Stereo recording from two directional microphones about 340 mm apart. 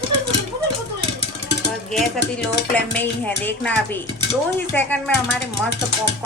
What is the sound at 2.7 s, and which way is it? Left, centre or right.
Dishes, centre.